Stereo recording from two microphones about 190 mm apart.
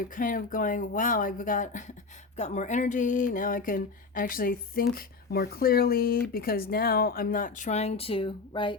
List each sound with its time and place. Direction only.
0.2 s speech: 45° left (ahead or behind); by 8.8 s 25° left (ahead or behind)